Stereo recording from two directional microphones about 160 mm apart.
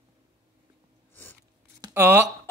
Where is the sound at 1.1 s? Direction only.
10° left (ahead or behind).